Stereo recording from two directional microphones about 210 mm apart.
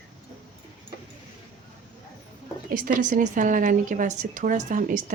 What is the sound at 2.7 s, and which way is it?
Speech, 40° right (ahead or behind).